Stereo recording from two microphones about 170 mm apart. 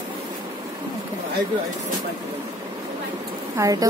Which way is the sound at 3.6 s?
20° right (ahead or behind).